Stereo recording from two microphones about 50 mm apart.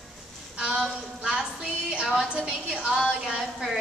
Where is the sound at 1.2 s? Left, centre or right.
Centre.